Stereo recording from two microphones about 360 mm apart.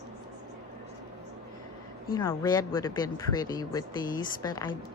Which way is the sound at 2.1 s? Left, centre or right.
Centre.